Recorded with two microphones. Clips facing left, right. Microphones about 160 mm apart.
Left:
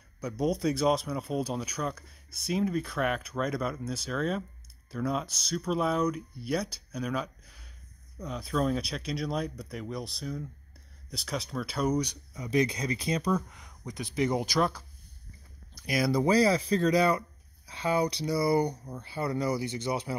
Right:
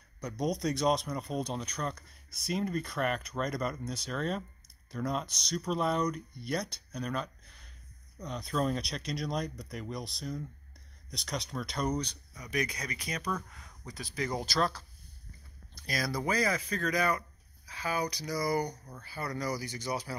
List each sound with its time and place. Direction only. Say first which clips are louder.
0.2 s speech: left 4 dB; 5° left (ahead or behind)
12.4 s speech: left 7 dB; 25° left (ahead or behind)